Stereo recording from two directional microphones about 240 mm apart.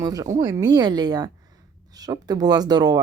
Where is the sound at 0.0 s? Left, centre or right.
Centre.